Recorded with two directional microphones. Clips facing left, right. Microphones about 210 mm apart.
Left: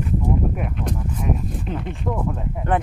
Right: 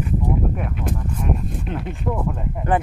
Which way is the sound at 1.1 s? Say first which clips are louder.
Even; 5° left (ahead or behind).